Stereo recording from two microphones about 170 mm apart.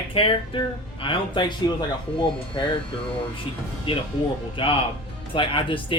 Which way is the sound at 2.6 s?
25° left (ahead or behind).